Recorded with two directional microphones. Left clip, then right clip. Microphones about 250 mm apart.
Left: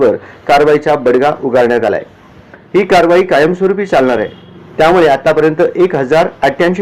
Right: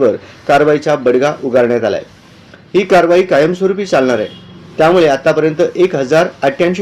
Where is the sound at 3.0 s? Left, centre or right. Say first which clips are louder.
Left 1 dB; centre.